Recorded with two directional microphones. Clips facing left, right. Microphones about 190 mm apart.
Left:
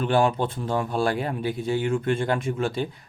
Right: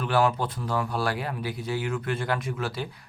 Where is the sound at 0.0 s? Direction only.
25° left (ahead or behind).